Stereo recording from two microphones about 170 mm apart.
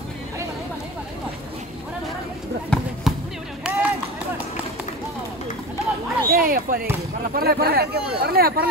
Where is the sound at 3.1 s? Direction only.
Centre (ahead or behind).